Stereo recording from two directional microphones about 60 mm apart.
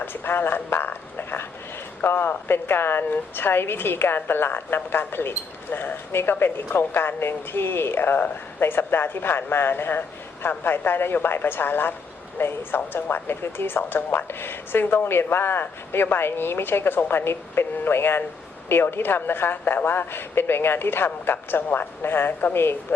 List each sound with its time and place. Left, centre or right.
0.0 s a woman's voice: left